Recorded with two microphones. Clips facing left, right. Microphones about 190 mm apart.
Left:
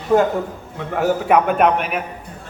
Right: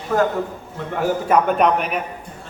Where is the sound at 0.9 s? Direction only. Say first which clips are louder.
Left 2 dB; 5° left (ahead or behind).